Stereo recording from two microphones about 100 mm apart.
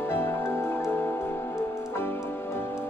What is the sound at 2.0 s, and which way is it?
Music, 25° left (ahead or behind).